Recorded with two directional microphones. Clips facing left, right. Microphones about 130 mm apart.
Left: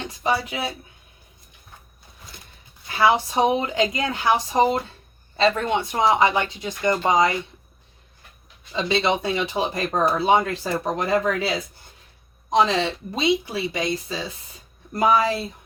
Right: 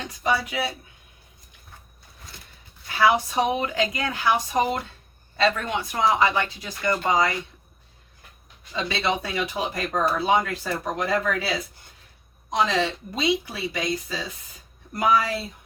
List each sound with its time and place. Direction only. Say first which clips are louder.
0.0 s speech: left 1 dB; 30° left (ahead or behind)
3.0 s speech: left 2 dB; 25° left (ahead or behind)
8.7 s speech: left 4 dB; 25° left (ahead or behind)
12.5 s speech: left 3 dB; 30° left (ahead or behind)